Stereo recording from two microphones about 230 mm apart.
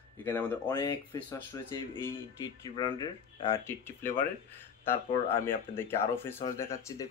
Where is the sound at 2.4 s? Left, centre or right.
Centre.